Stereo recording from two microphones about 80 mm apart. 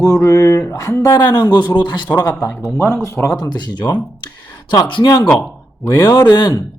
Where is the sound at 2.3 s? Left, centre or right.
Left.